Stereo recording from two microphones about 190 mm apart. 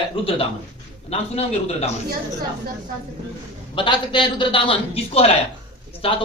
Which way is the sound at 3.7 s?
25° left (ahead or behind).